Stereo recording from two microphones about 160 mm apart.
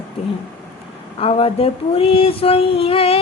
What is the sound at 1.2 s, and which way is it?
Female singing, 35° left (ahead or behind).